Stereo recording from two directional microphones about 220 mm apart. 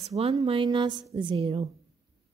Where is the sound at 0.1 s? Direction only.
25° right (ahead or behind).